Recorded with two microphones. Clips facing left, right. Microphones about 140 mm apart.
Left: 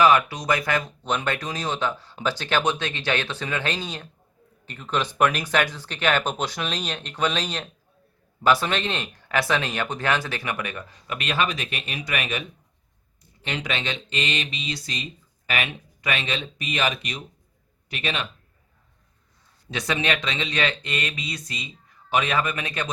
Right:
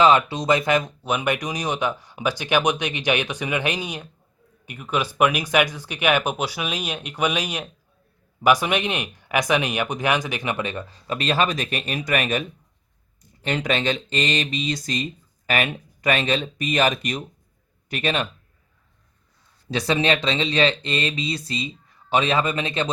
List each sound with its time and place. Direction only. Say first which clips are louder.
0.0 s a man's voice: right 2 dB; 25° right (ahead or behind); by 18.3 s 45° right (ahead or behind)
19.7 s speech: right 5 dB; 30° right (ahead or behind)